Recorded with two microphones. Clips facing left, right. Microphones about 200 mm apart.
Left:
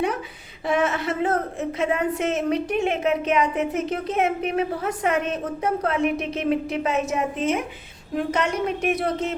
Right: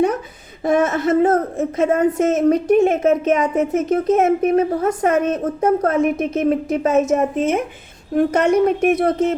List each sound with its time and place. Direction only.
0.6 s a woman's voice: 45° right (ahead or behind)